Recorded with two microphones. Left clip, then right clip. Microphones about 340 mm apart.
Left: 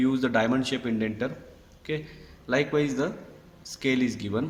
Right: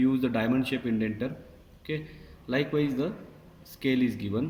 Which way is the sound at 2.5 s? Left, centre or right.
Left.